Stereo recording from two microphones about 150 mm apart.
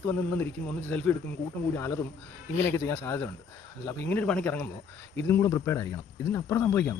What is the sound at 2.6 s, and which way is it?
Speech, 15° left (ahead or behind).